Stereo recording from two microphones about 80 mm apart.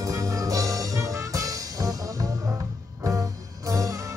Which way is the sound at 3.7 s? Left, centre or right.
Right.